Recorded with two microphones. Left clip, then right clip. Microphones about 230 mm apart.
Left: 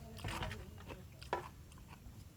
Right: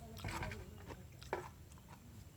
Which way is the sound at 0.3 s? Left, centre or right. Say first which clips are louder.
Left 1 dB; left.